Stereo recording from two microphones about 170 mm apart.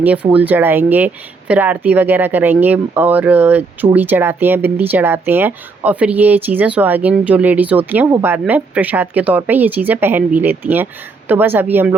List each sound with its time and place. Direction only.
0.0 s speech: 10° right (ahead or behind)